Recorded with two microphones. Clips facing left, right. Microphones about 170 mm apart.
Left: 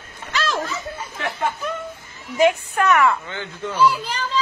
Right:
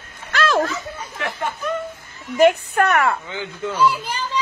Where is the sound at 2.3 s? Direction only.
60° right (ahead or behind).